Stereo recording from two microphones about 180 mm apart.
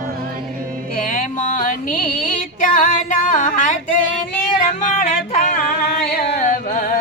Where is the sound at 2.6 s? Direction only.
50° left (ahead or behind).